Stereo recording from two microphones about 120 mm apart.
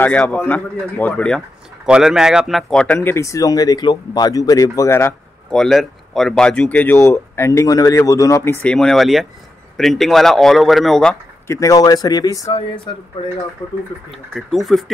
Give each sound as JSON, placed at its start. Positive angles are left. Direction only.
{"t": 0.2, "sound": "speech", "side_deg": 10}
{"t": 1.9, "sound": "speech", "side_deg": -5}
{"t": 5.5, "sound": "speech", "side_deg": 0}
{"t": 8.6, "sound": "a man's voice", "side_deg": 5}
{"t": 11.4, "sound": "speech", "side_deg": 25}
{"t": 12.5, "sound": "speech", "side_deg": 45}
{"t": 14.1, "sound": "a man's voice", "side_deg": 0}